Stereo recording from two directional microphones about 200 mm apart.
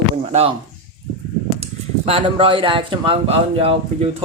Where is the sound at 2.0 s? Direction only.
25° right (ahead or behind).